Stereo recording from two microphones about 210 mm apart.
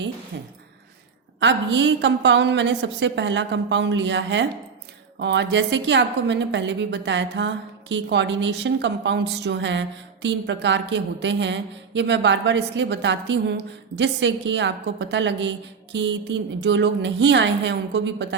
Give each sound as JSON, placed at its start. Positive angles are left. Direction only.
{"t": 1.4, "sound": "a woman's voice", "side_deg": -60}